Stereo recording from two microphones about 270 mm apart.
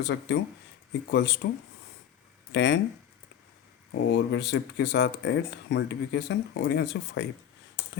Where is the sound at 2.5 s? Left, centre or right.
Left.